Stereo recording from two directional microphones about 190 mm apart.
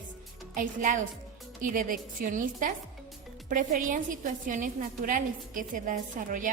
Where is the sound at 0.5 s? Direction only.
45° right (ahead or behind).